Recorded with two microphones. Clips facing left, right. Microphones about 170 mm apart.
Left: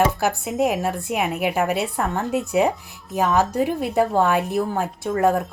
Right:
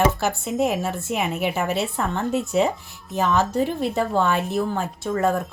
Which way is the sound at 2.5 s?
15° left (ahead or behind).